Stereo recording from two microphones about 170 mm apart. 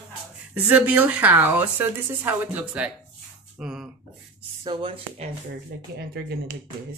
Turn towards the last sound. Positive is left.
turn(degrees=-30)  # may be behind; listen again after turning